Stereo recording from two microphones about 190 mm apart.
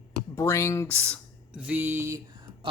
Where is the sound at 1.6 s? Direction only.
10° right (ahead or behind).